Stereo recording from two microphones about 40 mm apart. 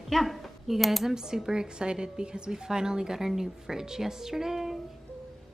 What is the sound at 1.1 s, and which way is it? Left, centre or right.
A woman's voice, centre.